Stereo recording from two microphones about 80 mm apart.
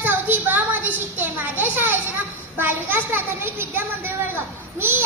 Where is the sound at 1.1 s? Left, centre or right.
Right.